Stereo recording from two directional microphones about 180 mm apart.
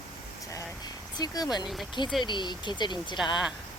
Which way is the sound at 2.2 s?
25° left (ahead or behind).